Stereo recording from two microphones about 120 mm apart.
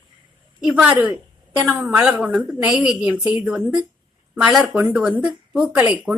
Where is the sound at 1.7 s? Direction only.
20° right (ahead or behind).